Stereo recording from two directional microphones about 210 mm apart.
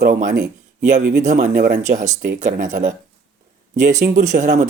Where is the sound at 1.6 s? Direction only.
35° right (ahead or behind).